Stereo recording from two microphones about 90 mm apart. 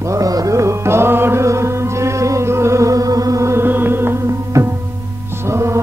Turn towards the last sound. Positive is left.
turn(degrees=-30)  # may be behind; listen again after turning